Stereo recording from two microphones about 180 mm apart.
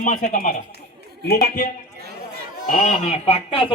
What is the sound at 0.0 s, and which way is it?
A man's voice, 45° left (ahead or behind).